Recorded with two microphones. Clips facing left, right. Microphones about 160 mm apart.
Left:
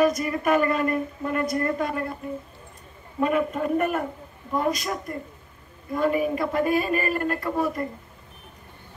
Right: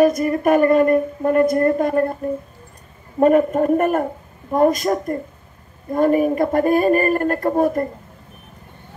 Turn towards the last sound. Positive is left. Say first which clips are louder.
# right 8 dB
turn(degrees=-50)  # may be behind; listen again after turning